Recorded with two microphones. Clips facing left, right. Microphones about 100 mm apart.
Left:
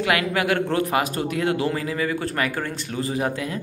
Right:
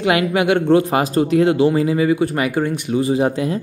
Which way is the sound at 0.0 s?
20° right (ahead or behind).